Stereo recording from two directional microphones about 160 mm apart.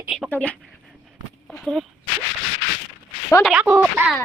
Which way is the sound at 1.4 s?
Centre (ahead or behind).